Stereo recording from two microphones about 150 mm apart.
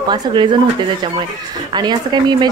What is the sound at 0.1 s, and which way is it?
Speech, 30° right (ahead or behind).